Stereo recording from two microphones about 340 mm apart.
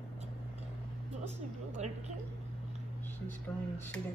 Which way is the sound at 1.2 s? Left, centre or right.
Centre.